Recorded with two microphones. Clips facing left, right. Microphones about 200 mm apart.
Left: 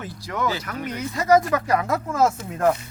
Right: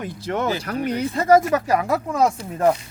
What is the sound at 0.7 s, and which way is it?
Speech, 40° right (ahead or behind).